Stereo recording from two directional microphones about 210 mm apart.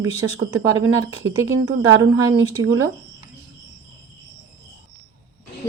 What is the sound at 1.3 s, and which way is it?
Speech, 20° right (ahead or behind).